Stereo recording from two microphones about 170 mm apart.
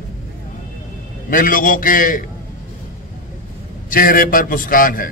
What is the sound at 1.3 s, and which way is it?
Speech, 55° left (ahead or behind).